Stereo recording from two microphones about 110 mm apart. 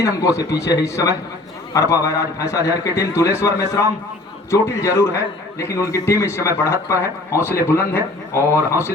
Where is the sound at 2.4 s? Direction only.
30° left (ahead or behind).